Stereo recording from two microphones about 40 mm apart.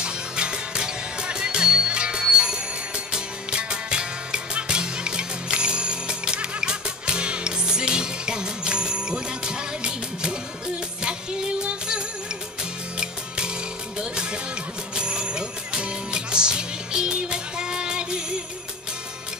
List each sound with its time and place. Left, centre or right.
0.0 s music: right
13.9 s music: right